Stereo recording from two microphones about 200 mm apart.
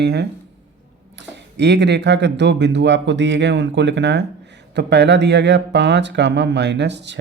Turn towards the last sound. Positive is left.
turn(degrees=-60)  # may be behind; listen again after turning